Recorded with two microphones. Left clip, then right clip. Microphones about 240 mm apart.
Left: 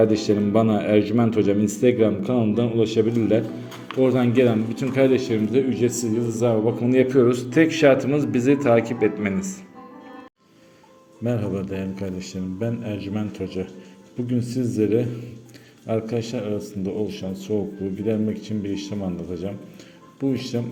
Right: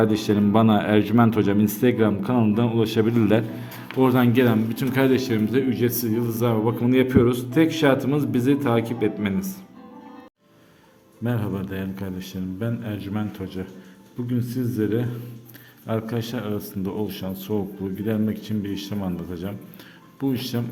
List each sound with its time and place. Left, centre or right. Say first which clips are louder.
0.0 s a man's voice: left 2 dB; centre
11.2 s a man's voice: left 3 dB; centre
15.9 s a man's voice: left 3 dB; centre